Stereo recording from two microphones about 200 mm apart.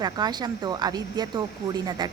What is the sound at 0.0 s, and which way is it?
Speech, 20° right (ahead or behind).